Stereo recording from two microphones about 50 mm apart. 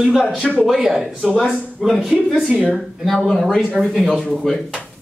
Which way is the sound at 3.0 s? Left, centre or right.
Centre.